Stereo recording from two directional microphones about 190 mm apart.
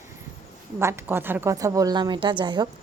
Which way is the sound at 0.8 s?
15° right (ahead or behind).